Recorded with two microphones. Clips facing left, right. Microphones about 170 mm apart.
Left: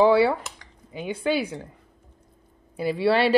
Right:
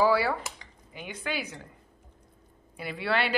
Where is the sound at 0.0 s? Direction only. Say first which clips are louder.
Left 6 dB; 25° left (ahead or behind).